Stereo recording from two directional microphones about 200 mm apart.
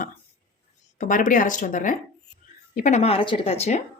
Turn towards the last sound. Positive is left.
turn(degrees=35)  # may be behind; listen again after turning